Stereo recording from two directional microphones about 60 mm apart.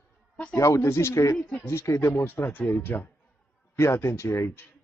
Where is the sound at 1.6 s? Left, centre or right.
Left.